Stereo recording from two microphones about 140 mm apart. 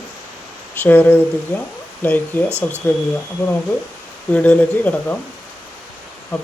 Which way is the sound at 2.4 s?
15° right (ahead or behind).